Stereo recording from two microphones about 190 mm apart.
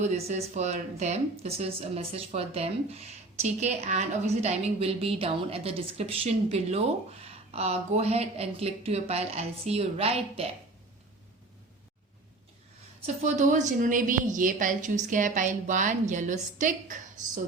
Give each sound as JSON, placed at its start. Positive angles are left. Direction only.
{"t": 0.0, "sound": "speech", "side_deg": -35}
{"t": 13.2, "sound": "speech", "side_deg": -40}